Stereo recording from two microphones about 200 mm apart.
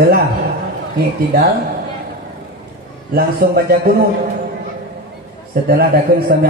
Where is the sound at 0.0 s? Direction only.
50° right (ahead or behind).